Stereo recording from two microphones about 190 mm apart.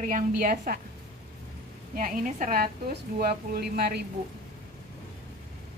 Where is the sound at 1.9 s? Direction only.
45° right (ahead or behind).